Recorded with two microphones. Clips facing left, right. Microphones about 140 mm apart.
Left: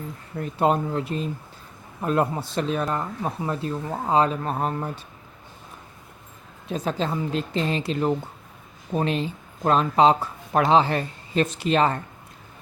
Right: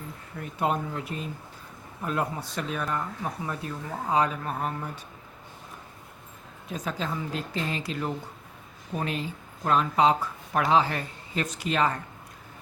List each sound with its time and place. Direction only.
0.3 s speech: 30° left (ahead or behind)
6.7 s speech: 30° left (ahead or behind)